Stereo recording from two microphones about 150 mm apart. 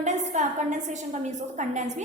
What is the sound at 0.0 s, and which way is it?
A woman's voice, 55° right (ahead or behind).